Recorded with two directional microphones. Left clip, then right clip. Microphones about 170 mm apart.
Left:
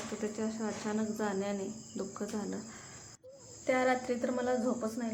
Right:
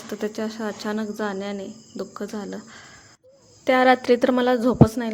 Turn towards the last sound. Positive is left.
turn(degrees=-65)  # may be behind; listen again after turning